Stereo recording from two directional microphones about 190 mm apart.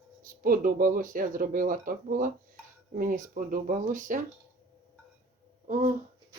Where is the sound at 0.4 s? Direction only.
50° right (ahead or behind).